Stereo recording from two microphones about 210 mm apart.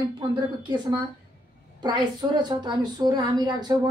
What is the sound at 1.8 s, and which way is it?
A woman's voice, 20° right (ahead or behind).